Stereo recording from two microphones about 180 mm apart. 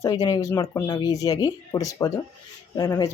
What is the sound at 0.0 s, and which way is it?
Speech, 20° left (ahead or behind).